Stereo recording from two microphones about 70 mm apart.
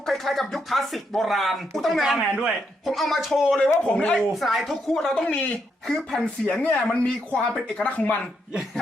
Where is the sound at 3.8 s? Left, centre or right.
Centre.